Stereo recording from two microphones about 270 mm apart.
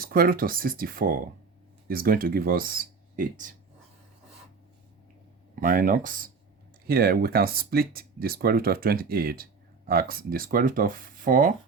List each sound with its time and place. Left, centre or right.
0.0 s speech: right
5.5 s speech: right